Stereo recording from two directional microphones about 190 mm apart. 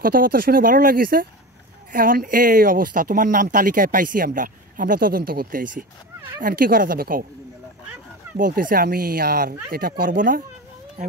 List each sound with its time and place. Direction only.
0.0 s speech: 50° right (ahead or behind)
8.4 s speech: 45° right (ahead or behind)